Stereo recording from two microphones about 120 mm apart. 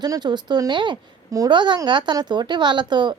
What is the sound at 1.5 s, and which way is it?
Speech, 40° right (ahead or behind).